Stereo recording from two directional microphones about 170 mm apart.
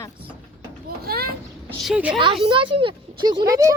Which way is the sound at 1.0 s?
65° right (ahead or behind).